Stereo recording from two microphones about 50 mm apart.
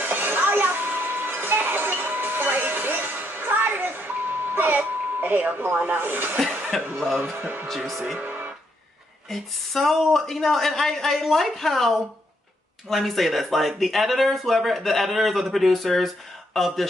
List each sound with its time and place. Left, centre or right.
0.0 s music: right
6.7 s speech: centre
8.2 s music: right
9.3 s speech: centre
12.9 s speech: centre